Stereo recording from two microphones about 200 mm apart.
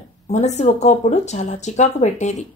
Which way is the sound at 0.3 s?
35° left (ahead or behind).